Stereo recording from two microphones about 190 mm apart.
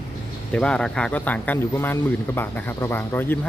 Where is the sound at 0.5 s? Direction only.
5° left (ahead or behind).